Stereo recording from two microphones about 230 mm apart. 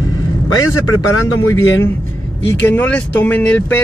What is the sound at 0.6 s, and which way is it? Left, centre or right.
Speech, left.